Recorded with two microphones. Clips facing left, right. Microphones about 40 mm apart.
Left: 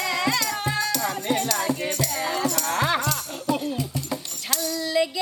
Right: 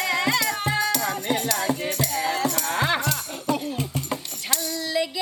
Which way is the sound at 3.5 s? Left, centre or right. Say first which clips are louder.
Even; right.